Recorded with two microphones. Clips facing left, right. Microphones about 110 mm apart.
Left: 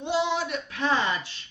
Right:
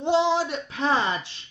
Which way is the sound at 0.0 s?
30° right (ahead or behind).